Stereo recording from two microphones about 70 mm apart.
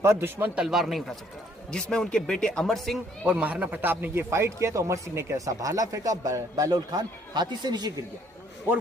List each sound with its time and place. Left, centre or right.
0.0 s a man's voice: right
0.5 s a man's voice: centre
3.2 s speech: centre; by 7.9 s right